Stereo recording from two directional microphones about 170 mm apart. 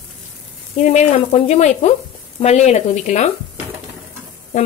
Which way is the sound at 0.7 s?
45° left (ahead or behind).